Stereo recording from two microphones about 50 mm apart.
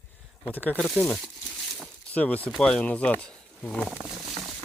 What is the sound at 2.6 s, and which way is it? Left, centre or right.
Speech, centre.